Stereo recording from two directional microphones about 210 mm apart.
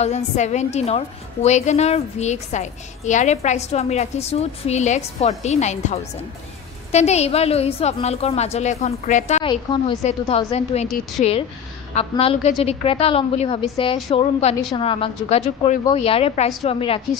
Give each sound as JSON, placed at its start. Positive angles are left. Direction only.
{"t": 0.0, "sound": "a woman's voice", "side_deg": 30}